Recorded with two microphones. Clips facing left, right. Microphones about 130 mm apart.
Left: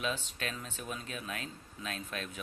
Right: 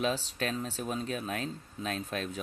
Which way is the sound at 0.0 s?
40° right (ahead or behind).